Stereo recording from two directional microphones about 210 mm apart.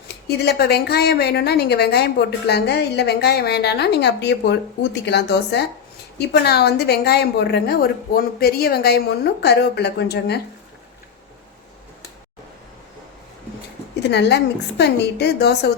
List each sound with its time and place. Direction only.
0.1 s a woman's voice: 50° left (ahead or behind)
13.9 s a woman's voice: 50° left (ahead or behind)